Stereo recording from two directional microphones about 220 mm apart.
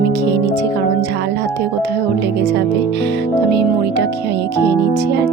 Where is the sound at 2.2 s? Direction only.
50° right (ahead or behind).